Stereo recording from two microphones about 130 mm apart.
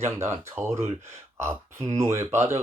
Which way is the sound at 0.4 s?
20° right (ahead or behind).